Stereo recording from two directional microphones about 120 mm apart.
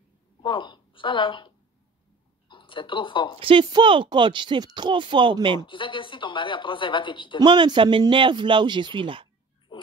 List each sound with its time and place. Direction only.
0.4 s a woman's voice: 40° left (ahead or behind)
3.3 s speech: 45° right (ahead or behind)
5.7 s a woman's voice: 45° left (ahead or behind)
7.3 s speech: 40° right (ahead or behind)
9.7 s oink: 35° left (ahead or behind)